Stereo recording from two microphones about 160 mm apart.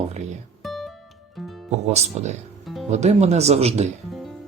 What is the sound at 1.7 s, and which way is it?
Speech, 45° right (ahead or behind).